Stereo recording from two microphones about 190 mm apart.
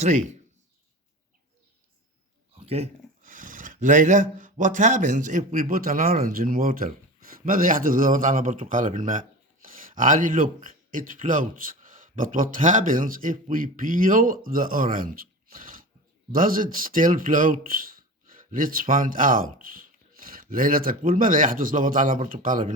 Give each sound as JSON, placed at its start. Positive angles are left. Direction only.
{"t": 2.6, "sound": "a man's voice", "side_deg": -30}